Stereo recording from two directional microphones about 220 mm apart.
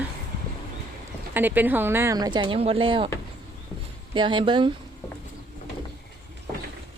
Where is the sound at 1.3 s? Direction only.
10° right (ahead or behind); by 3.1 s 25° right (ahead or behind).